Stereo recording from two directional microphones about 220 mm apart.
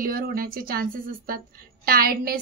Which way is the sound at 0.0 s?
40° right (ahead or behind).